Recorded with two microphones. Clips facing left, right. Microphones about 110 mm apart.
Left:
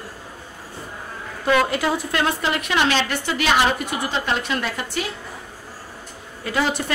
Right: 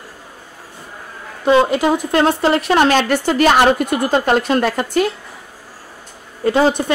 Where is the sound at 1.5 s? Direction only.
25° right (ahead or behind).